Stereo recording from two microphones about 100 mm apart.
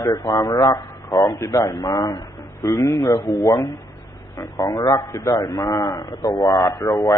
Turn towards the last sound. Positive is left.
turn(degrees=35)  # may be behind; listen again after turning